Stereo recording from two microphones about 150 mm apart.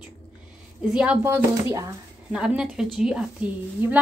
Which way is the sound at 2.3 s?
5° right (ahead or behind).